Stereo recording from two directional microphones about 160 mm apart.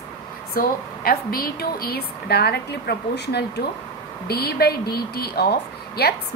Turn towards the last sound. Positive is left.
turn(degrees=80)